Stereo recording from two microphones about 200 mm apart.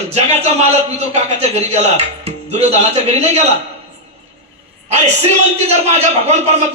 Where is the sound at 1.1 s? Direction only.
35° right (ahead or behind).